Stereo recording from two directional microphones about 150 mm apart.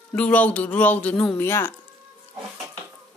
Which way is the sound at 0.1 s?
10° left (ahead or behind).